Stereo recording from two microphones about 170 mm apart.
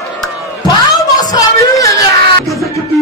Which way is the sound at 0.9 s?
20° left (ahead or behind).